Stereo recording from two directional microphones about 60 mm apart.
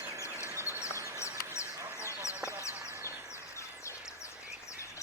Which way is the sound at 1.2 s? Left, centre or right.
Left.